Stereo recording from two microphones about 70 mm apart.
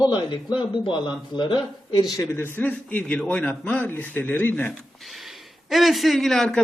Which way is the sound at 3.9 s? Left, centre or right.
Left.